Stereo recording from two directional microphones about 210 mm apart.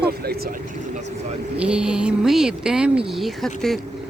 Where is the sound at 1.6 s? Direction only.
5° right (ahead or behind).